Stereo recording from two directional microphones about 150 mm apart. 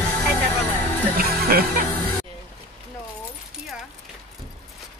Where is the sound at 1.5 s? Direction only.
85° right.